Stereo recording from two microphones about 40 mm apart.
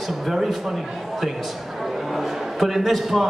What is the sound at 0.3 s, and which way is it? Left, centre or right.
Speech, centre.